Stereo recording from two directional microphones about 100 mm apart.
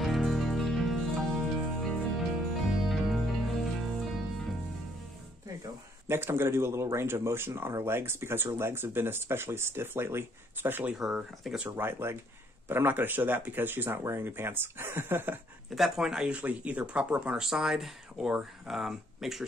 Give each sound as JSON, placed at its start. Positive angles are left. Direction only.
{"t": 0.0, "sound": "music", "side_deg": 0}
{"t": 6.0, "sound": "speech", "side_deg": -25}
{"t": 10.9, "sound": "speech", "side_deg": -5}
{"t": 11.7, "sound": "speech", "side_deg": -25}
{"t": 15.7, "sound": "speech", "side_deg": -5}